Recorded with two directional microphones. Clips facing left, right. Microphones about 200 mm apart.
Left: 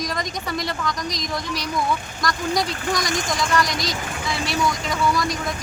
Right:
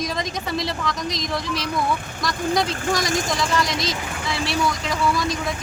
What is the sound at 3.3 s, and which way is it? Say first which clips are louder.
A woman's voice: even; centre (ahead or behind).